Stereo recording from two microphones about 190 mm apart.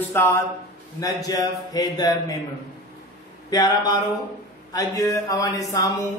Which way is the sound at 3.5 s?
20° left (ahead or behind).